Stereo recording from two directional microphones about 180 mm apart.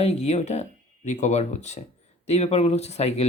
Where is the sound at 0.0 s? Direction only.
35° left (ahead or behind).